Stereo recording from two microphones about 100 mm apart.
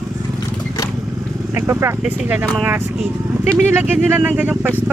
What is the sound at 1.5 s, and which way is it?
Speech, 25° right (ahead or behind).